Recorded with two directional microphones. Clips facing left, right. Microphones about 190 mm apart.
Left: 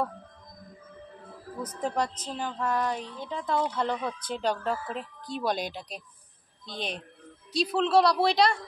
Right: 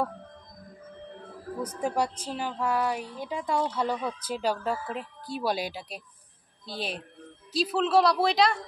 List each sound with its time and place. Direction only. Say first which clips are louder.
1.6 s a woman's voice: right 1 dB; 10° right (ahead or behind)